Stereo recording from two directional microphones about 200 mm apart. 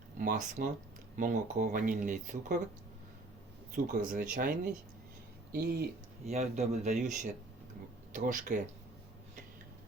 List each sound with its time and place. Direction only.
0.2 s speech: 45° right (ahead or behind)
4.1 s speech: 40° right (ahead or behind)
6.2 s speech: 35° right (ahead or behind)